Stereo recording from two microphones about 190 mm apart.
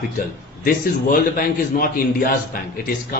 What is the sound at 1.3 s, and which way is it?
A man's voice, 50° left (ahead or behind).